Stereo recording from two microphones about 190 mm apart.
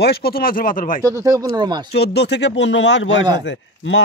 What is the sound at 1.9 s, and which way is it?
Speech, 60° left (ahead or behind).